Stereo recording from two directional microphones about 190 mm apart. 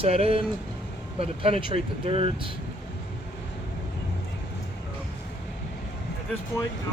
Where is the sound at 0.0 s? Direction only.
30° right (ahead or behind).